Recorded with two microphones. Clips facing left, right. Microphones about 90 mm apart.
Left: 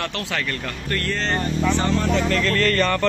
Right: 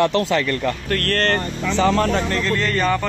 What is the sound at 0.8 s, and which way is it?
Speech, 70° right (ahead or behind).